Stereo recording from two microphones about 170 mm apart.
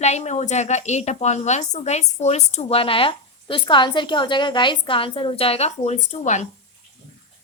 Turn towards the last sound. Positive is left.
turn(degrees=45)  # may be behind; listen again after turning